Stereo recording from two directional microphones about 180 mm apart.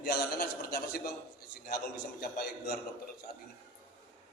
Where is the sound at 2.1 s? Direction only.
60° left (ahead or behind).